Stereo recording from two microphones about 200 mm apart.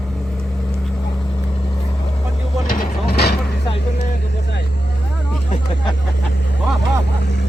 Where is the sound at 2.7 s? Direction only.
45° left (ahead or behind).